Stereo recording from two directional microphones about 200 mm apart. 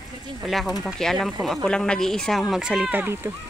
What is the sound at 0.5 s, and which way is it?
Speech, centre (ahead or behind).